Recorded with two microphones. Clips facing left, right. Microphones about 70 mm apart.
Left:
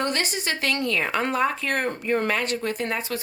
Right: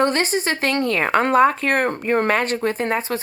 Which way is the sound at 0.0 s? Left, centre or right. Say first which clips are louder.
Right 7 dB; right.